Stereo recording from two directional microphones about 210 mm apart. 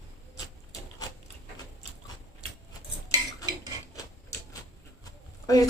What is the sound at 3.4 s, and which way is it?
Cutlery, 15° left (ahead or behind).